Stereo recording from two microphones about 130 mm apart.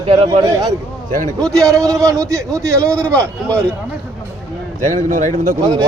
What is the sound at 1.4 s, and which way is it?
Speech, 5° left (ahead or behind).